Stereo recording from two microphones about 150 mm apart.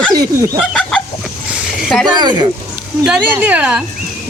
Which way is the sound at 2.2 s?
30° right (ahead or behind).